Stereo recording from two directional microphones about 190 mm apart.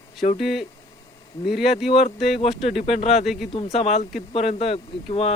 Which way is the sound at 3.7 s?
35° left (ahead or behind).